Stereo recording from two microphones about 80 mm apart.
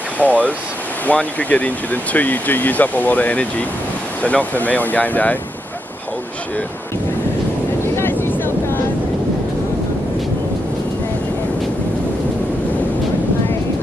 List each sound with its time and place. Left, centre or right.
0.2 s speech: centre
7.8 s vehicle: left